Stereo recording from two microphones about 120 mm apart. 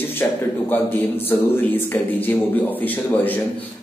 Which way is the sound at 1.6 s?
15° left (ahead or behind).